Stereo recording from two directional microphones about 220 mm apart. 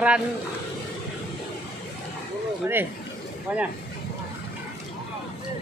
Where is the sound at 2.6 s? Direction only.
10° right (ahead or behind).